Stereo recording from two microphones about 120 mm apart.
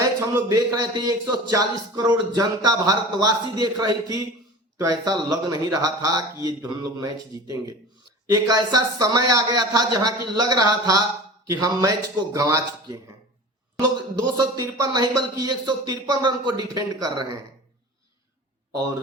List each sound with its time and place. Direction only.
0.0 s a man's voice: 30° right (ahead or behind)
14.3 s speech: 35° right (ahead or behind)